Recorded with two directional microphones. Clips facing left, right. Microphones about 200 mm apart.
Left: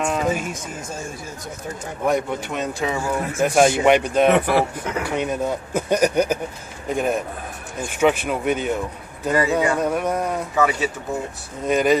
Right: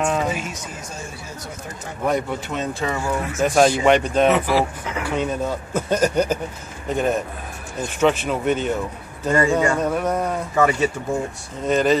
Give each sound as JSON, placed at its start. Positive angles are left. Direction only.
{"t": 0.0, "sound": "a sound", "side_deg": 5}
{"t": 2.0, "sound": "speech", "side_deg": 10}
{"t": 4.3, "sound": "speech", "side_deg": 55}
{"t": 5.0, "sound": "speech", "side_deg": 10}